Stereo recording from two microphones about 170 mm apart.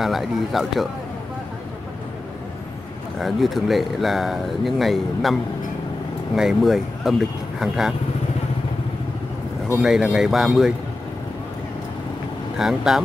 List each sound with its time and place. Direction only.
0.0 s speech: centre (ahead or behind)
3.2 s speech: centre (ahead or behind)
9.8 s speech: 5° right (ahead or behind)
12.5 s speech: centre (ahead or behind)